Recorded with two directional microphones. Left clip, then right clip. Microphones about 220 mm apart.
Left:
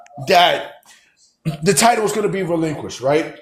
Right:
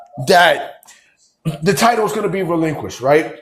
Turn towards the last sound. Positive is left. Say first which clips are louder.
# right 4 dB
turn(degrees=-10)  # may be behind; listen again after turning